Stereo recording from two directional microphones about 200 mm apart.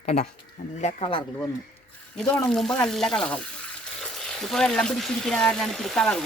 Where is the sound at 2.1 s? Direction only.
5° left (ahead or behind).